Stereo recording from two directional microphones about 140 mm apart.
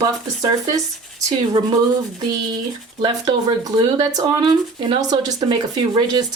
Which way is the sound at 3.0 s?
30° right (ahead or behind).